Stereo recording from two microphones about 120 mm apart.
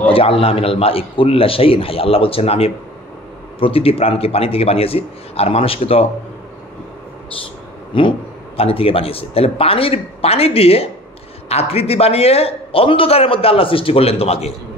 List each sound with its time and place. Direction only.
0.1 s a man's voice: 50° left (ahead or behind)
8.5 s a man's voice: 50° left (ahead or behind)